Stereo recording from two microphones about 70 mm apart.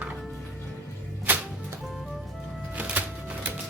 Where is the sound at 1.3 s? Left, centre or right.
Right.